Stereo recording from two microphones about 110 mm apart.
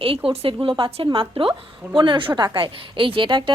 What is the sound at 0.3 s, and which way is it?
A woman's voice, 55° right (ahead or behind).